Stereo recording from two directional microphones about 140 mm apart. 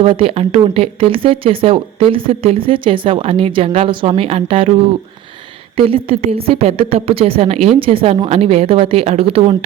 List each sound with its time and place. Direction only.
0.0 s a woman's voice: 40° right (ahead or behind)